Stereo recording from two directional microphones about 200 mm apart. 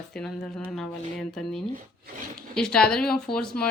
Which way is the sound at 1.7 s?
40° right (ahead or behind).